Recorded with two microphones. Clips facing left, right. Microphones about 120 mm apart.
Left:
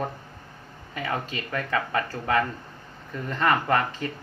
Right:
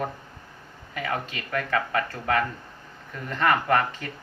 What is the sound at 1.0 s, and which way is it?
Speech, 30° left (ahead or behind).